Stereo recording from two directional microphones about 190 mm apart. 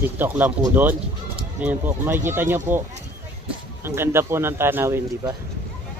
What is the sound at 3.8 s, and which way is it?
Speech, 15° right (ahead or behind).